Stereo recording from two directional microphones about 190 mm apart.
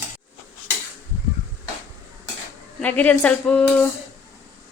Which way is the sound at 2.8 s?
10° left (ahead or behind).